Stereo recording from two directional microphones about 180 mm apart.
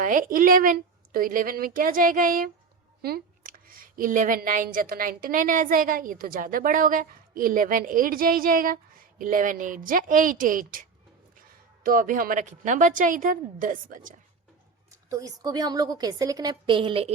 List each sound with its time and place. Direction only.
0.0 s a woman's voice: 50° right (ahead or behind)
14.8 s a woman's voice: 20° right (ahead or behind)